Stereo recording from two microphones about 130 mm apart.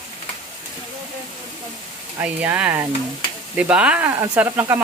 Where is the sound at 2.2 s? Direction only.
10° right (ahead or behind).